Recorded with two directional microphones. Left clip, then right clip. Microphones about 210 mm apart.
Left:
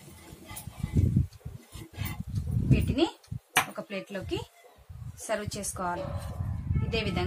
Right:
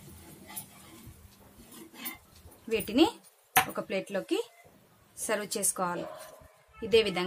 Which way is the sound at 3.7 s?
45° right (ahead or behind).